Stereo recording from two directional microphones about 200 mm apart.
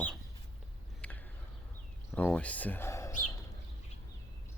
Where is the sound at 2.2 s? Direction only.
5° left (ahead or behind).